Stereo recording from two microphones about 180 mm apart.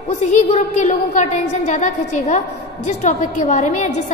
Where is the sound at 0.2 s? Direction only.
40° left (ahead or behind).